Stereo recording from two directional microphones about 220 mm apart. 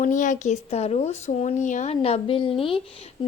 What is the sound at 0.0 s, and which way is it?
A child's voice, 35° left (ahead or behind).